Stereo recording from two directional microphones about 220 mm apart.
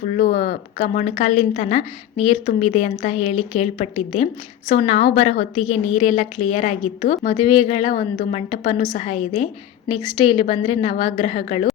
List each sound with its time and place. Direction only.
0.0 s a woman's voice: 35° left (ahead or behind)